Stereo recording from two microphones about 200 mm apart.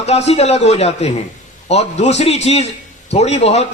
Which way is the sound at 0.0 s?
35° left (ahead or behind).